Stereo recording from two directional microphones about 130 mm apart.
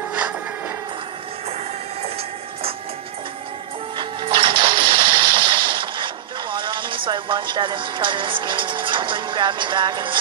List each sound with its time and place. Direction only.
3.9 s music: 40° right (ahead or behind)
7.1 s speech: 35° right (ahead or behind)